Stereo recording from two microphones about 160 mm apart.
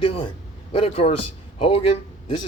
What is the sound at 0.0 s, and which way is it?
A man's voice, 35° left (ahead or behind).